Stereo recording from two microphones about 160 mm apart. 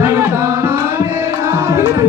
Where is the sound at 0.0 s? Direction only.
15° right (ahead or behind).